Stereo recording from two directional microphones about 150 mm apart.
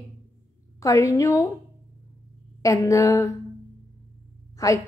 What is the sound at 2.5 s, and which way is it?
Speech, 20° left (ahead or behind).